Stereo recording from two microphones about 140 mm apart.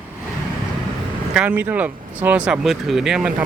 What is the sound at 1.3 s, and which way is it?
Speech, 10° right (ahead or behind).